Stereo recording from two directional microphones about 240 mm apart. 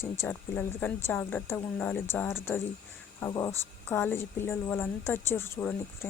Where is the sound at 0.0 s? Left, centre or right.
Centre.